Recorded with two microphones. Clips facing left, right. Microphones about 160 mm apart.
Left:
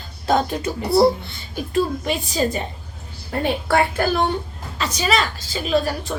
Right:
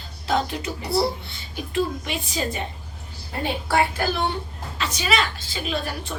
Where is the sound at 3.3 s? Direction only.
60° left (ahead or behind).